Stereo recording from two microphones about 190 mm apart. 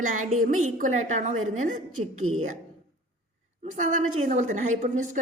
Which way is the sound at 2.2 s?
90° right.